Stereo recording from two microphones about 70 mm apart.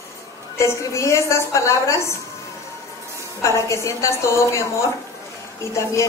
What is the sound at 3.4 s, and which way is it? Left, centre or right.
A woman's voice, left.